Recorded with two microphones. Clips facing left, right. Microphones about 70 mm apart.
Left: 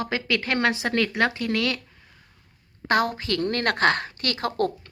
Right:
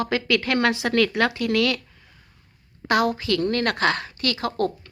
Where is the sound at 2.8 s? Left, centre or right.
Left.